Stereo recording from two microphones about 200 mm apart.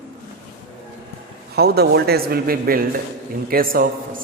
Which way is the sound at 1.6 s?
55° right (ahead or behind).